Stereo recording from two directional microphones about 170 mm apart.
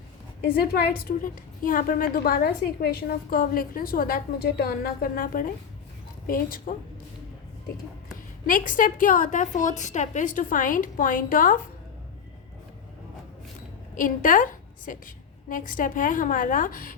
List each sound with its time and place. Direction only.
0.4 s a woman's voice: 60° left (ahead or behind)
8.1 s a woman's voice: 50° left (ahead or behind)
13.9 s a woman's voice: 50° left (ahead or behind)